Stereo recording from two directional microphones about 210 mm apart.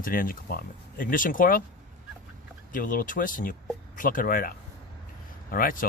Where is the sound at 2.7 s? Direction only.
40° left (ahead or behind).